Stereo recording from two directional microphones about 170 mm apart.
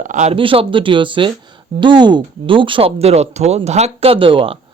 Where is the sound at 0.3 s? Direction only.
30° right (ahead or behind).